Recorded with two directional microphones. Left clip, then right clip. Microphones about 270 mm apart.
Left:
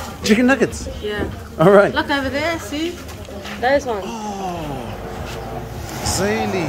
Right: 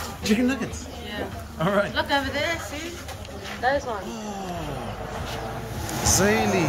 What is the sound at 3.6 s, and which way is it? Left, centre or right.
Speech, left.